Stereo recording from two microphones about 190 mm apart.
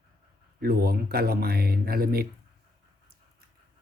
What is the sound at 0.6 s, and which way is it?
Speech, 55° right (ahead or behind).